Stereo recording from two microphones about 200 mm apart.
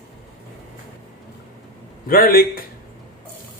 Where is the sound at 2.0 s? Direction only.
45° left (ahead or behind).